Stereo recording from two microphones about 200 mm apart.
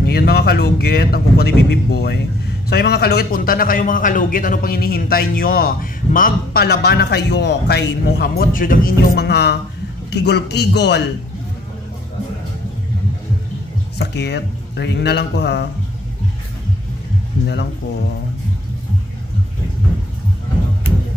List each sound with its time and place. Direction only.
0.0 s a man's voice: 50° left (ahead or behind)
13.9 s speech: 60° left (ahead or behind)